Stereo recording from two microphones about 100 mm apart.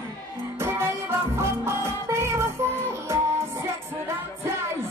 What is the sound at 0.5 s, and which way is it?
Music, 25° right (ahead or behind).